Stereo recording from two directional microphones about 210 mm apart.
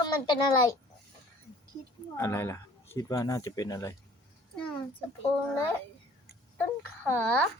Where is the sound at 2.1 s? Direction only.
10° left (ahead or behind).